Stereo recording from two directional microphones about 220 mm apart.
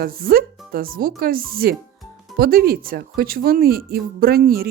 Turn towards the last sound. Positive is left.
turn(degrees=-45)  # may be behind; listen again after turning